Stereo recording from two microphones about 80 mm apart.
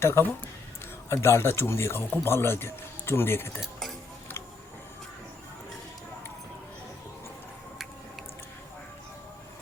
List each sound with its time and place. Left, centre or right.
0.0 s a man's voice: left
3.6 s speech: centre